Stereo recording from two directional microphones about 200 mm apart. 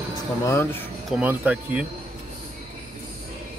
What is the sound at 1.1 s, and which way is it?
Speech, 5° right (ahead or behind).